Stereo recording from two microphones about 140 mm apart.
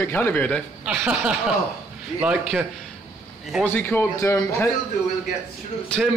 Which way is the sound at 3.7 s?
15° left (ahead or behind).